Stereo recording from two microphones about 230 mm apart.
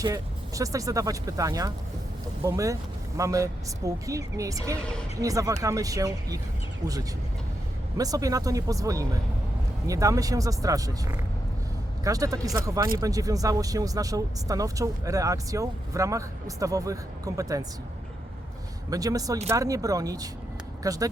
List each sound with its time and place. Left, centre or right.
0.0 s speech: centre
7.9 s speech: centre
18.9 s speech: centre